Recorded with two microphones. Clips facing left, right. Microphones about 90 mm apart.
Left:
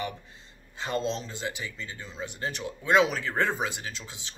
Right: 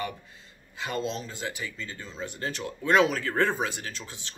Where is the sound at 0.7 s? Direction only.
30° left (ahead or behind).